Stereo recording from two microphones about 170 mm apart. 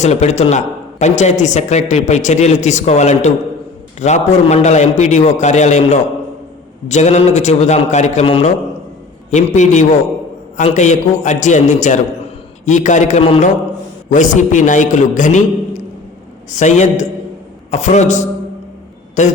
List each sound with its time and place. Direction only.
0.0 s a man's voice: 40° left (ahead or behind)